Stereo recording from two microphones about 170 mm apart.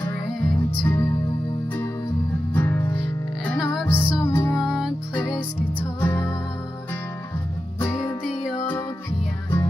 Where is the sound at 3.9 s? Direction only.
15° left (ahead or behind).